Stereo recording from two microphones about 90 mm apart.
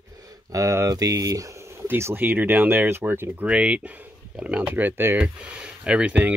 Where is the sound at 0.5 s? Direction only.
35° right (ahead or behind).